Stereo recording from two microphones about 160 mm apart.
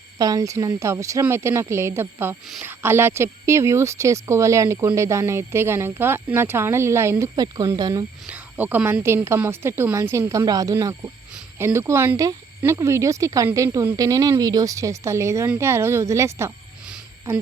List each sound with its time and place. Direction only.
0.2 s speech: 20° right (ahead or behind)
8.3 s speech: 10° right (ahead or behind)